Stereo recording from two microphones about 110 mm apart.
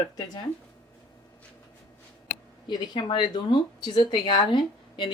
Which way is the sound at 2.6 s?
45° left (ahead or behind).